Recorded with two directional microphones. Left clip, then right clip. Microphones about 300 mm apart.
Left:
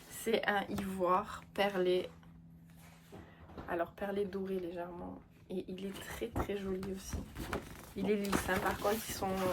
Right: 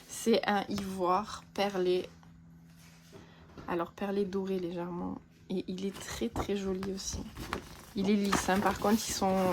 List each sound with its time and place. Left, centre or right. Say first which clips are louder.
0.3 s speech: right 4 dB; centre
3.7 s speech: right 3 dB; centre